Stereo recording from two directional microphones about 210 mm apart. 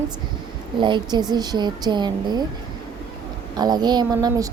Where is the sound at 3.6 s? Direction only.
20° right (ahead or behind).